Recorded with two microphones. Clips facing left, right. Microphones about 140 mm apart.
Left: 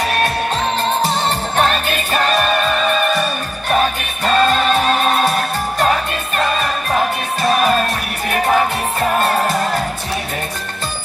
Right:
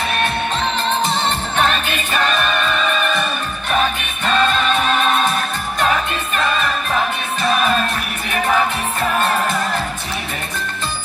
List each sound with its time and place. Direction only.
1.5 s music: 35° left (ahead or behind)
4.3 s music: 35° left (ahead or behind)
9.0 s music: 35° left (ahead or behind)